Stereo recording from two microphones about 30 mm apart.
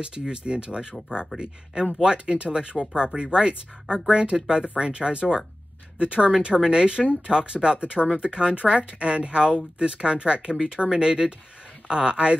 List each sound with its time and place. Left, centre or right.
0.3 s speech: right